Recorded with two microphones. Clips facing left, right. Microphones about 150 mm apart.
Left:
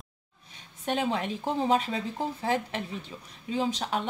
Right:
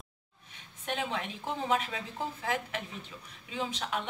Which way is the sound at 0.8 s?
35° left (ahead or behind).